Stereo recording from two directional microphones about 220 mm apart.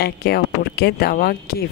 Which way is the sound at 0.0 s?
45° left (ahead or behind).